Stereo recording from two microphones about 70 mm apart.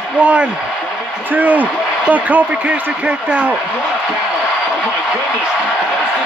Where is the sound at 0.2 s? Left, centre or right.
Centre.